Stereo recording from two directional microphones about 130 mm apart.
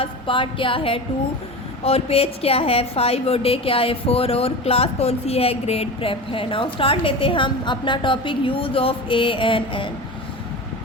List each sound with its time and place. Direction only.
0.0 s a woman's voice: 40° left (ahead or behind)